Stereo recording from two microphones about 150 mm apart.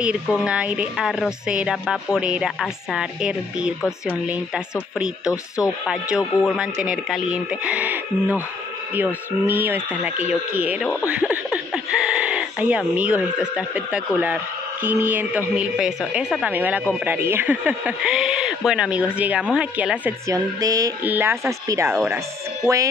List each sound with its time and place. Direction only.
0.0 s a woman's voice: 5° right (ahead or behind)
20.2 s speech: 25° right (ahead or behind)
21.0 s speech: 15° right (ahead or behind)